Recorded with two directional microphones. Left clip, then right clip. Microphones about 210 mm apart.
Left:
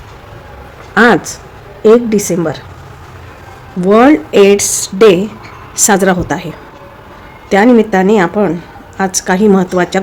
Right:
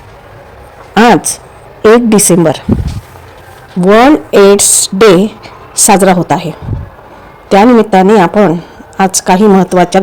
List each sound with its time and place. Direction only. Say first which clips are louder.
0.9 s a sound: right 2 dB; 30° right (ahead or behind)
1.8 s a woman's voice: right 3 dB; 35° right (ahead or behind)
3.8 s a woman's voice: right 2 dB; 15° right (ahead or behind)
7.8 s a woman's voice: right 4 dB; 20° right (ahead or behind)